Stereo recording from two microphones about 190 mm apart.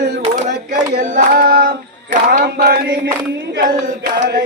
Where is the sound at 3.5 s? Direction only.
50° right (ahead or behind).